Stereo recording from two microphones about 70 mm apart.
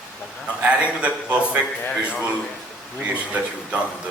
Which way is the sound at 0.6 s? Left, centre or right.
Centre.